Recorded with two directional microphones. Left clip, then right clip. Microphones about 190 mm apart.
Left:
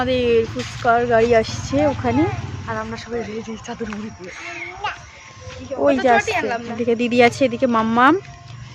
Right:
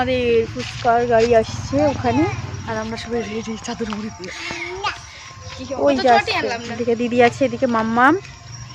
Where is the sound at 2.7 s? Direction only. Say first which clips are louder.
Right 2 dB; 35° right (ahead or behind).